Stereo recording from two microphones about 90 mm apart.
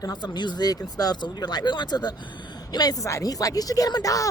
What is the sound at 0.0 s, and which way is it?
Speech, 50° left (ahead or behind).